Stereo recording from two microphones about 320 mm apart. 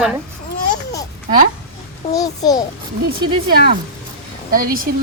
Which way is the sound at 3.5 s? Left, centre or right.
Right.